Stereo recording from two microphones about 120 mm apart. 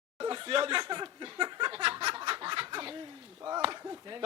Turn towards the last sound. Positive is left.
turn(degrees=-35)  # may be behind; listen again after turning